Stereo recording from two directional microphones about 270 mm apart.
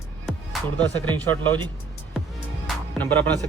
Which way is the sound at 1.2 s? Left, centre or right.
Centre.